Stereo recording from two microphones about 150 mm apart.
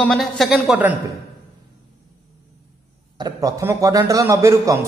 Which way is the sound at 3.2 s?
25° right (ahead or behind).